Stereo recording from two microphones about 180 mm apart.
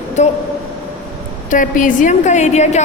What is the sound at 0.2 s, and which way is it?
Speech, 40° left (ahead or behind).